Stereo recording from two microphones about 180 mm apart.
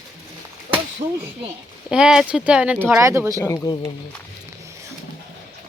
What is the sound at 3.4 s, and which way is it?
Speech, 20° left (ahead or behind).